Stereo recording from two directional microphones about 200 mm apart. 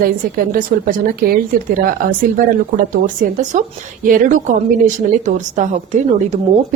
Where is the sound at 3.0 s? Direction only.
40° right (ahead or behind).